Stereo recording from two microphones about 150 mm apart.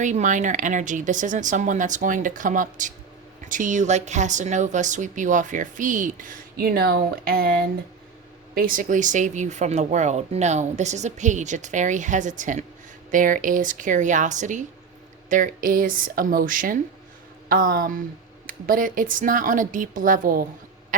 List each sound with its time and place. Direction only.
0.0 s speech: 55° right (ahead or behind); by 7.5 s 80° right
8.5 s speech: 65° right (ahead or behind)